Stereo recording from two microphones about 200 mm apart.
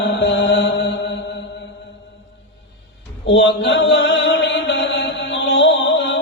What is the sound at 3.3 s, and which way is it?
Mantra, 65° left (ahead or behind).